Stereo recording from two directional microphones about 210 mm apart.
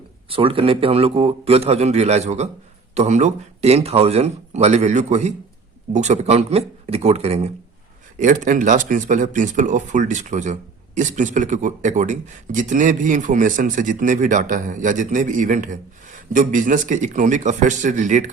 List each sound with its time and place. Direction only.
0.3 s a man's voice: 25° right (ahead or behind)